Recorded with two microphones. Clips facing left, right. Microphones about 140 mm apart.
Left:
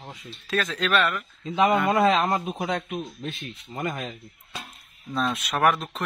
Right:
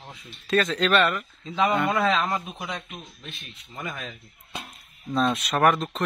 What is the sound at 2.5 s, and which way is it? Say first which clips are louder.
Speech: left 7 dB; 55° left (ahead or behind).